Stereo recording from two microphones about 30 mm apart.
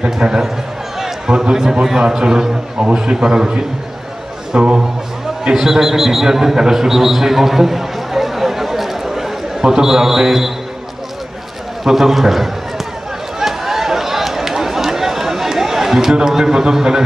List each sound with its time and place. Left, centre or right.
0.0 s a man's voice: right
2.8 s a man's voice: right
4.6 s speech: right
5.5 s a man's voice: centre
6.7 s a sound: centre
9.6 s a man's voice: centre
11.8 s a man's voice: centre
13.4 s a sound: centre
16.3 s a man's voice: centre